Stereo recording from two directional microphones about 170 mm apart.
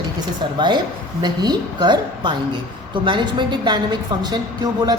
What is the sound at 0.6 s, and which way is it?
A man's voice, 25° right (ahead or behind).